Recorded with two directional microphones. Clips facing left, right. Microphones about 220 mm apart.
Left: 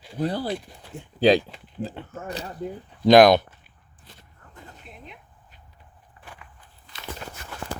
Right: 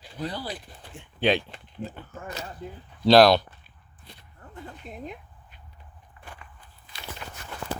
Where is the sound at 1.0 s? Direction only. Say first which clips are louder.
Left 6 dB; 35° left (ahead or behind).